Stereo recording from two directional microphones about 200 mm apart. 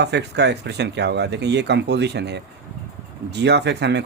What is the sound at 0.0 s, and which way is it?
Speech, 55° right (ahead or behind).